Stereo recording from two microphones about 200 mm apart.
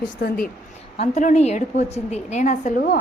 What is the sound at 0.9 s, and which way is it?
A woman's voice, 35° left (ahead or behind).